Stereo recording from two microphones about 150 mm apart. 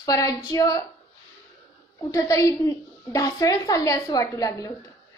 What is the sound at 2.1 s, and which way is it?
A woman's voice, 25° left (ahead or behind).